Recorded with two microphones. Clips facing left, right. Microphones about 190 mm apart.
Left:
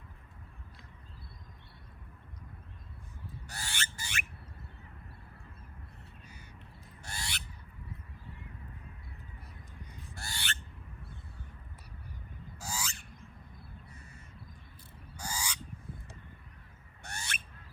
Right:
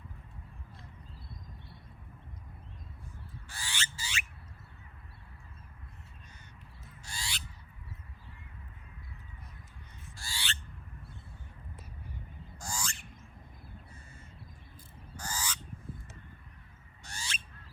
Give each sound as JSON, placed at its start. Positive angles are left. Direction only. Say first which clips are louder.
{"t": 3.5, "sound": "a sound", "louder": "even", "side_deg": 55}
{"t": 7.0, "sound": "owl", "louder": "left 1 dB", "side_deg": 55}
{"t": 10.2, "sound": "owl", "louder": "left 1 dB", "side_deg": 55}
{"t": 12.5, "sound": "owl", "louder": "even", "side_deg": 5}
{"t": 15.1, "sound": "honk", "louder": "even", "side_deg": 10}
{"t": 17.0, "sound": "owl", "louder": "left 2 dB", "side_deg": 60}